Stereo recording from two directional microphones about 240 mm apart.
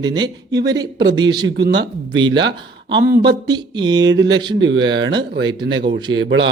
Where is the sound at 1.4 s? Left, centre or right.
Right.